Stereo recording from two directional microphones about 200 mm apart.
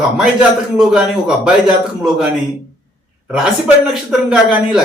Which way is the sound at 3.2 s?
5° right (ahead or behind).